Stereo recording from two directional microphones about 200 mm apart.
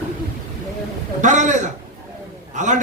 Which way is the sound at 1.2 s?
40° right (ahead or behind).